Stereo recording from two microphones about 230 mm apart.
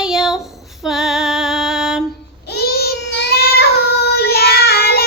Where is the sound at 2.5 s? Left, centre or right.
Left.